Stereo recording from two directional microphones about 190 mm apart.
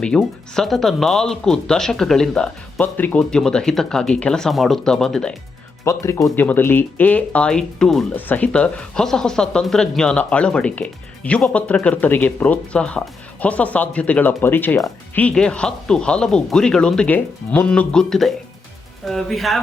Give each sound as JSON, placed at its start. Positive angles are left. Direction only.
{"t": 0.0, "sound": "speech", "side_deg": 5}
{"t": 5.8, "sound": "speech", "side_deg": 15}